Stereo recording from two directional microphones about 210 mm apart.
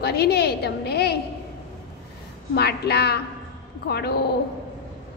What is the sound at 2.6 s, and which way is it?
A woman's voice, 50° left (ahead or behind).